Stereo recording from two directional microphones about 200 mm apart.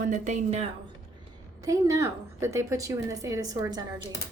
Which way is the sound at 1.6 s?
15° right (ahead or behind).